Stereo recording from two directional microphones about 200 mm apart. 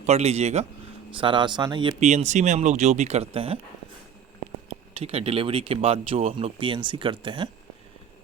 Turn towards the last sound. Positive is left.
turn(degrees=-25)  # may be behind; listen again after turning